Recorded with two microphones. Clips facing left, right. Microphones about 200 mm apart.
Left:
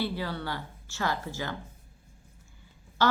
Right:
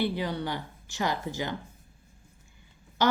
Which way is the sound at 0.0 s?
15° right (ahead or behind).